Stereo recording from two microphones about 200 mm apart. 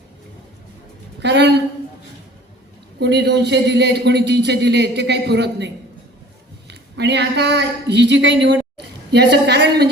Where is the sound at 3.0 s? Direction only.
60° right (ahead or behind).